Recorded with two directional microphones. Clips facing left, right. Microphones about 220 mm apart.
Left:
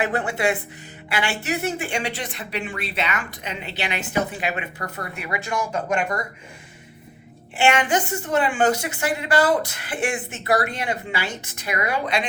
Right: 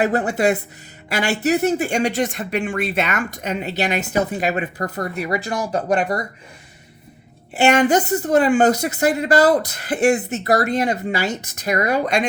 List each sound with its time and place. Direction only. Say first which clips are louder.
0.0 s speech: right 5 dB; 40° right (ahead or behind)
7.5 s speech: right 5 dB; 40° right (ahead or behind)